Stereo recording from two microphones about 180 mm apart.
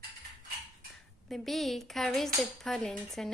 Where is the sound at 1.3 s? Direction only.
Centre (ahead or behind).